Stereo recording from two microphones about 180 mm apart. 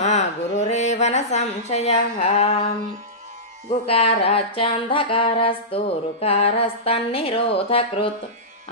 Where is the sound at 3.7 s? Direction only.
35° left (ahead or behind).